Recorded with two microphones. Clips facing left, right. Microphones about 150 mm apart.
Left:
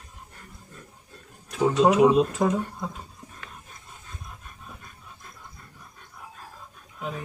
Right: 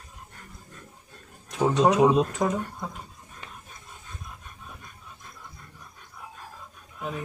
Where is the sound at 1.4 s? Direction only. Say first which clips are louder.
Left 1 dB; 20° right (ahead or behind).